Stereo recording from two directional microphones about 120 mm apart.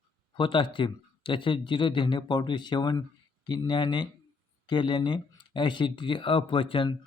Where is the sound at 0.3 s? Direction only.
45° left (ahead or behind).